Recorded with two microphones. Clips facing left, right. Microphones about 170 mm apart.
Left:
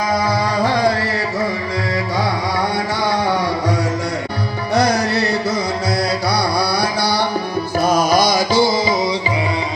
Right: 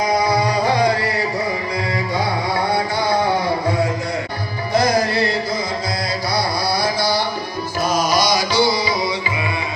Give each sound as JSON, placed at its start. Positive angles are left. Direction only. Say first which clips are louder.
{"t": 6.7, "sound": "music", "louder": "left 1 dB", "side_deg": 65}